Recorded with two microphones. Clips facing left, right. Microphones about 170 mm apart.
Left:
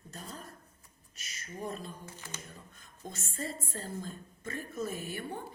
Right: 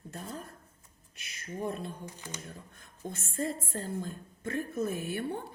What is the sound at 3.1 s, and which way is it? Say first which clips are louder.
A woman's voice: right 6 dB; 55° right (ahead or behind).